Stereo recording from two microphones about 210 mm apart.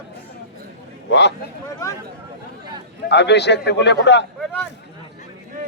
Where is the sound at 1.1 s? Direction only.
55° left (ahead or behind).